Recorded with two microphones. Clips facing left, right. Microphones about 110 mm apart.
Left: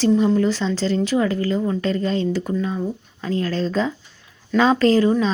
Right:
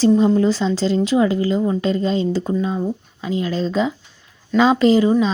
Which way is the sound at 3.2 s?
10° right (ahead or behind).